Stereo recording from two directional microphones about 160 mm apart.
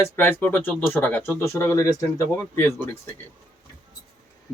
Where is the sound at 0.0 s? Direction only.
10° left (ahead or behind).